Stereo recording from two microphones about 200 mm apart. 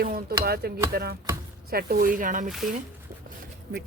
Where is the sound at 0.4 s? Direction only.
50° right (ahead or behind).